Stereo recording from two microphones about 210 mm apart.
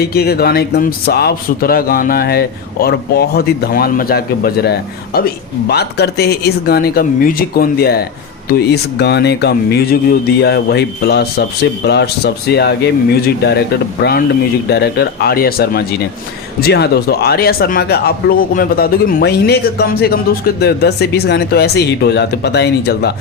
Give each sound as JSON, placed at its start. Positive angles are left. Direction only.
{"t": 0.0, "sound": "a man's voice", "side_deg": 50}